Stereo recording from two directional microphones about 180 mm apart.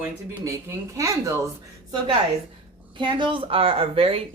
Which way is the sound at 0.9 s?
20° right (ahead or behind).